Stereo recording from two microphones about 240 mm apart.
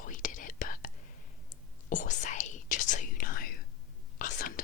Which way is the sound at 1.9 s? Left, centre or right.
Left.